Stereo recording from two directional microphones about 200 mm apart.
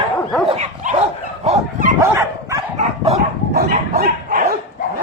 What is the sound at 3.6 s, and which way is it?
Bow-wow, 50° right (ahead or behind).